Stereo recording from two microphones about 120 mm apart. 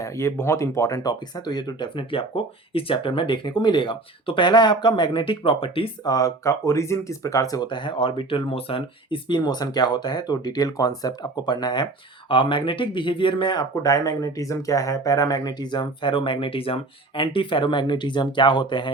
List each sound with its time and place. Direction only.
0.0 s speech: 20° left (ahead or behind); by 5.9 s 50° left (ahead or behind)
6.1 s speech: 30° left (ahead or behind)